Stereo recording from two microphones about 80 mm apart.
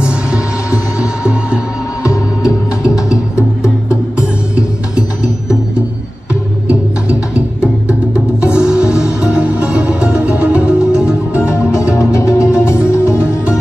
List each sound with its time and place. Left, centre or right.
0.0 s music: centre
2.0 s music: left
4.6 s music: centre
6.7 s music: centre
11.4 s music: left